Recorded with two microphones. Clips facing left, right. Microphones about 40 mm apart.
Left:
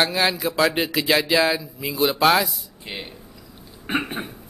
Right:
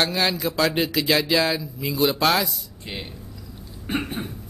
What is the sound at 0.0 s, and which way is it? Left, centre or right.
A man's voice, centre.